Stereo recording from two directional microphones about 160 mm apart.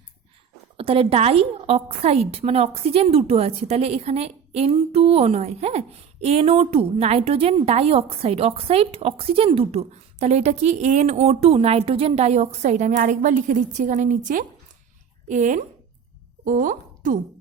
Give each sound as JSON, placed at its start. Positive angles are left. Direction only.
{"t": 0.8, "sound": "a woman's voice", "side_deg": -35}